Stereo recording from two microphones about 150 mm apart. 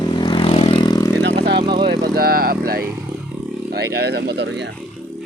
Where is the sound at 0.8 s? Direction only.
25° left (ahead or behind).